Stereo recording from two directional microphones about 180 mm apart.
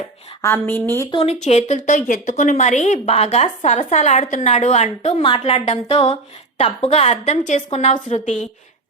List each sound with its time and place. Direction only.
0.4 s a woman's voice: 15° left (ahead or behind)
1.1 s a woman's voice: 35° left (ahead or behind)